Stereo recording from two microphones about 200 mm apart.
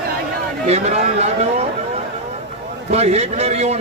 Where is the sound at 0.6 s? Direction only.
35° right (ahead or behind).